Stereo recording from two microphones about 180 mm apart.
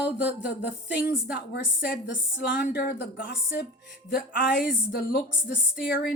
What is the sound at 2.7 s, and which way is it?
A woman's voice, 70° left (ahead or behind).